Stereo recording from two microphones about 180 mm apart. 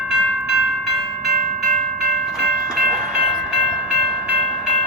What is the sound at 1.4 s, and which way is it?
Train, 45° right (ahead or behind).